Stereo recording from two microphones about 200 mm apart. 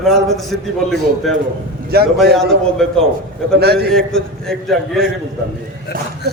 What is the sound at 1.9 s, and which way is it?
Speech, 50° right (ahead or behind).